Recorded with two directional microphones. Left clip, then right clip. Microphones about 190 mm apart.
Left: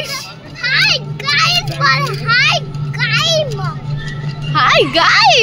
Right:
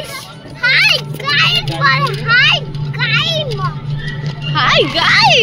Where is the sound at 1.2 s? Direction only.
20° left (ahead or behind).